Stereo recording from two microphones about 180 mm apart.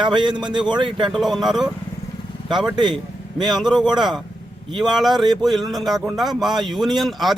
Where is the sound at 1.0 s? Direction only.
Centre (ahead or behind).